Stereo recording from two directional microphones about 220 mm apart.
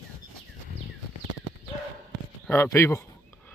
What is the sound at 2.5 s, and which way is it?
Speech, 10° left (ahead or behind).